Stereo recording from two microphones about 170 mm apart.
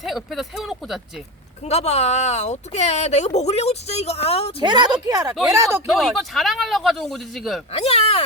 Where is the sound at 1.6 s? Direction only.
40° left (ahead or behind).